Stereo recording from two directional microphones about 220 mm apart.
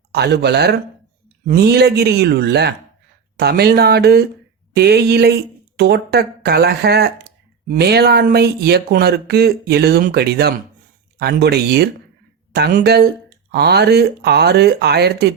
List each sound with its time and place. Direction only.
0.1 s speech: 50° right (ahead or behind)